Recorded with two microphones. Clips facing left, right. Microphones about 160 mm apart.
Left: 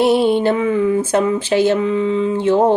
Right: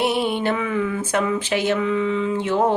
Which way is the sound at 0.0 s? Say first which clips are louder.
Left 7 dB; 30° left (ahead or behind).